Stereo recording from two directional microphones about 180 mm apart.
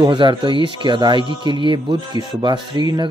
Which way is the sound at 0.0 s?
25° right (ahead or behind).